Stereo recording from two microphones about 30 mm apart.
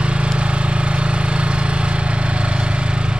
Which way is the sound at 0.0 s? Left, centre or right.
Right.